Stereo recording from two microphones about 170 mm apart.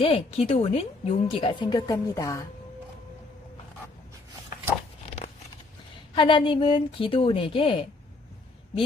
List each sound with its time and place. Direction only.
0.0 s a woman's voice: 35° left (ahead or behind); by 2.4 s 20° left (ahead or behind)
6.1 s a woman's voice: 30° left (ahead or behind)